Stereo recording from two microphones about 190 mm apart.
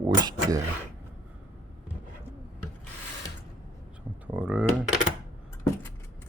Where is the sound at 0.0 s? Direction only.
20° right (ahead or behind).